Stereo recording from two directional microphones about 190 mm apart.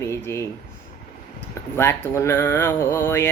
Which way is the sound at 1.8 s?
15° left (ahead or behind).